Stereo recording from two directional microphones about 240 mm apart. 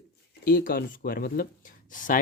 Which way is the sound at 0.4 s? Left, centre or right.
Left.